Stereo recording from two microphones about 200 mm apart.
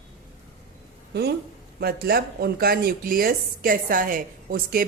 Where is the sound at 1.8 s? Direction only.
50° right (ahead or behind).